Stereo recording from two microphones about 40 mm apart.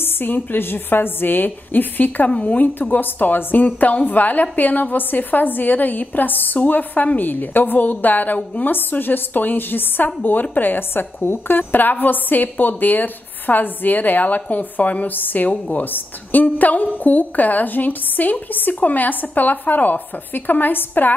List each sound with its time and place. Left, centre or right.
0.0 s a woman's voice: left
2.2 s a woman's voice: left